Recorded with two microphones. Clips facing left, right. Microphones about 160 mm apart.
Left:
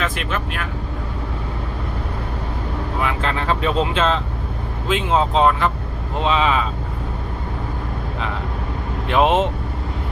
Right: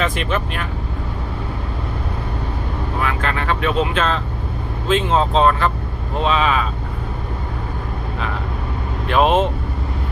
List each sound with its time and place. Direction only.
0.0 s speech: centre (ahead or behind)
3.0 s speech: 20° left (ahead or behind)
9.0 s speech: 20° left (ahead or behind)